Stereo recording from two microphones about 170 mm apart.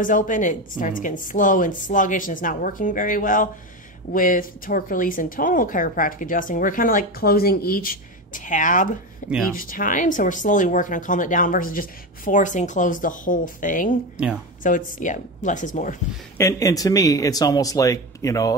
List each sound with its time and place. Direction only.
0.0 s a woman's voice: 50° left (ahead or behind)
16.3 s speech: 20° left (ahead or behind)